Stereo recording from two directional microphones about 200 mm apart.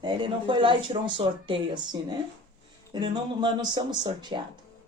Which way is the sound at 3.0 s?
20° right (ahead or behind).